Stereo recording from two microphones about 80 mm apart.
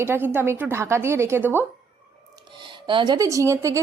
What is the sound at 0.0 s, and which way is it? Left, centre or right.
A woman's voice, right.